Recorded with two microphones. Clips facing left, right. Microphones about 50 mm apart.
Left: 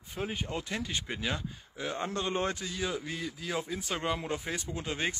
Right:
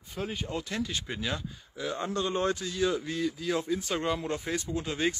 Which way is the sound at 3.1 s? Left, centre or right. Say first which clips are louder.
Right 5 dB; left.